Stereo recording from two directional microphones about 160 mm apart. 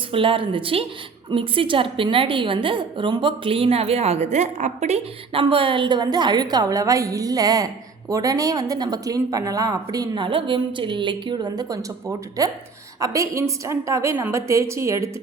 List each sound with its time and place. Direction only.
0.1 s a woman's voice: 35° right (ahead or behind); by 15.1 s 20° right (ahead or behind)